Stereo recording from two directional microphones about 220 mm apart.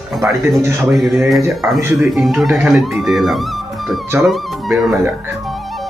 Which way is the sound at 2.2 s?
Centre (ahead or behind).